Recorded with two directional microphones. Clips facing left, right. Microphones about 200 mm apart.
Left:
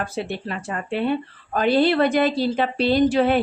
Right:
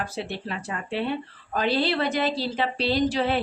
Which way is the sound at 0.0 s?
50° left (ahead or behind).